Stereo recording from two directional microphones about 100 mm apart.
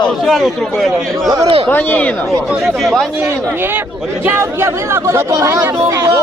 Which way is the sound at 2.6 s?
Centre (ahead or behind).